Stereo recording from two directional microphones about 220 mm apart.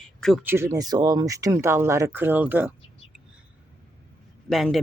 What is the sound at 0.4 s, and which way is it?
Speech, 10° right (ahead or behind).